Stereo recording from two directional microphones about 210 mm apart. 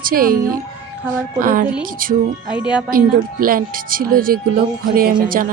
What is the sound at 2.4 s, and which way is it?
Speech, 5° right (ahead or behind).